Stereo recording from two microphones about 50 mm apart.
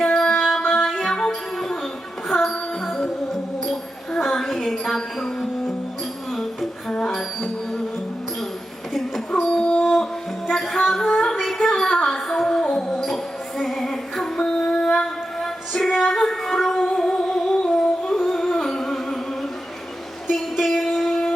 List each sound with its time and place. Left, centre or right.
0.1 s music: centre
4.1 s a sound: centre
4.4 s music: centre
7.1 s music: centre
8.9 s a sound: centre
9.3 s music: centre
10.5 s music: centre
11.3 s child singing: centre
11.9 s music: centre
14.3 s female singing: centre
16.7 s music: centre
20.3 s a sound: centre